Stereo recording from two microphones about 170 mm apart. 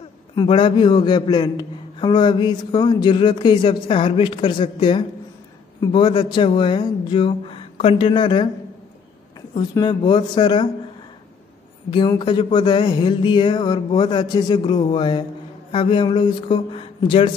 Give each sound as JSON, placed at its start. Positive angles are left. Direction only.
{"t": 0.4, "sound": "a man's voice", "side_deg": 30}
{"t": 9.5, "sound": "a man's voice", "side_deg": 25}
{"t": 11.9, "sound": "a man's voice", "side_deg": 30}